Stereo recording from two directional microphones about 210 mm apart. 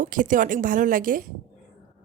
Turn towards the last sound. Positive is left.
turn(degrees=-40)  # may be behind; listen again after turning